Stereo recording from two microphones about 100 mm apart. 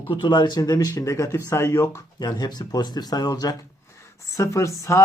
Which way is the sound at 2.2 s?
40° left (ahead or behind).